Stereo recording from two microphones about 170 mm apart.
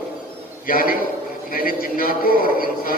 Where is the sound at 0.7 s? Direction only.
60° left (ahead or behind).